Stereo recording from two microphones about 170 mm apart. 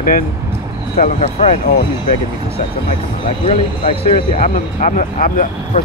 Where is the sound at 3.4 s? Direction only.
35° left (ahead or behind).